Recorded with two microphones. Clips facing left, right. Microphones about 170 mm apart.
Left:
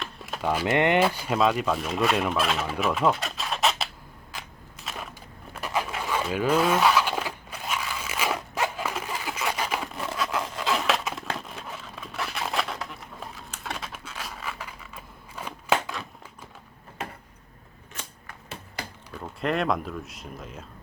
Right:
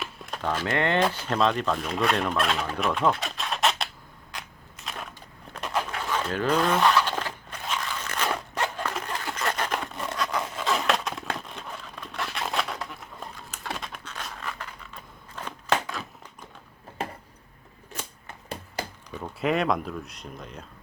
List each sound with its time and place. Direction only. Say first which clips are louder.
0.0 s a sound: even; centre (ahead or behind)
0.4 s speech: left 3 dB; 10° left (ahead or behind)
0.9 s turkey: left 1 dB; 10° left (ahead or behind)
4.3 s crushing: even; centre (ahead or behind)
5.5 s a sound: even; 5° left (ahead or behind)
19.1 s speech: right 2 dB; centre (ahead or behind)